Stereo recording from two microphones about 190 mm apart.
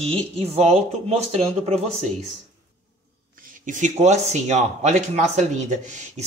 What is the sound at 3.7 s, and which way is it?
Speech, 40° right (ahead or behind).